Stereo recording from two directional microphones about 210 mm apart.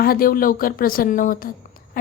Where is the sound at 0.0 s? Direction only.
45° left (ahead or behind).